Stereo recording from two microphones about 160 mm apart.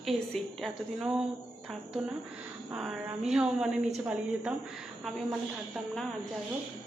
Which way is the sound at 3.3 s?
5° right (ahead or behind).